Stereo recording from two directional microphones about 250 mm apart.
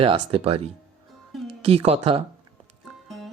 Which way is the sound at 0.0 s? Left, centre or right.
Right.